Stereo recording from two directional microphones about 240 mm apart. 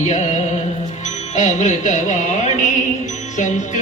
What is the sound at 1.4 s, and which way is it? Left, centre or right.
Music, left.